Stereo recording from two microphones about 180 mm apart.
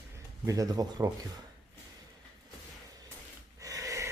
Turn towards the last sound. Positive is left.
turn(degrees=-15)  # may be behind; listen again after turning